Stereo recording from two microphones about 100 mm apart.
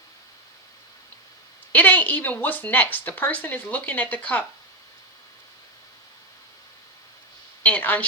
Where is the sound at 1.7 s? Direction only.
15° left (ahead or behind).